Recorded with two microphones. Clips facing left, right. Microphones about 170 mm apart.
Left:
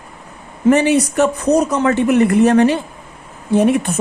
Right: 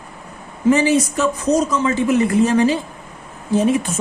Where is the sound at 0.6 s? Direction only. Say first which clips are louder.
Left 2 dB; 60° left (ahead or behind).